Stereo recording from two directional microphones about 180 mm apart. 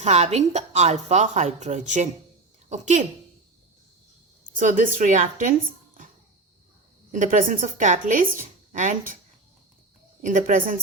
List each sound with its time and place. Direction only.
0.0 s a woman's voice: 40° right (ahead or behind)
4.5 s speech: 45° right (ahead or behind)
7.1 s speech: 45° right (ahead or behind)
10.2 s speech: 45° right (ahead or behind)